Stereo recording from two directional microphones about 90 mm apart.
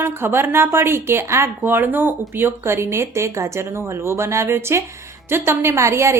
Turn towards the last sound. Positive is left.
turn(degrees=-30)  # may be behind; listen again after turning